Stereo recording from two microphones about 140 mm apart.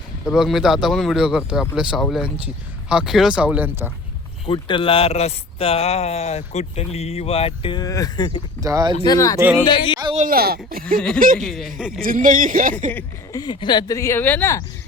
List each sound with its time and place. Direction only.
0.3 s speech: centre (ahead or behind)
4.4 s speech: 35° left (ahead or behind)
8.6 s speech: 25° right (ahead or behind)
9.0 s speech: 25° left (ahead or behind)
9.4 s speech: 15° right (ahead or behind)
9.6 s music: 35° left (ahead or behind)
10.2 s speech: 90° right
10.8 s speech: 5° left (ahead or behind)
12.0 s speech: 75° right (ahead or behind)
13.3 s speech: 30° left (ahead or behind); by 14.6 s 15° left (ahead or behind)